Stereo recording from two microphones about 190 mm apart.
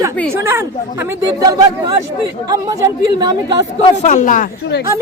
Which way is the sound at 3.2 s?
20° right (ahead or behind).